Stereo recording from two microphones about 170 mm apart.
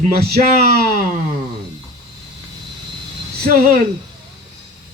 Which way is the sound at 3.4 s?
55° right (ahead or behind).